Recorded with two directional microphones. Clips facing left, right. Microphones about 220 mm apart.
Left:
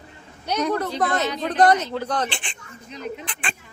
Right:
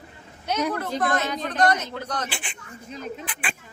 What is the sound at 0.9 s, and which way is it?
Speech, 45° right (ahead or behind).